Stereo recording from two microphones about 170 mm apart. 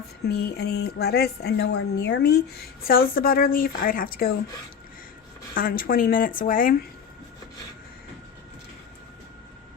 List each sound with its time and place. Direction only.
0.3 s speech: 70° left (ahead or behind)
2.8 s a woman's voice: 60° left (ahead or behind)
5.5 s a woman's voice: 55° left (ahead or behind)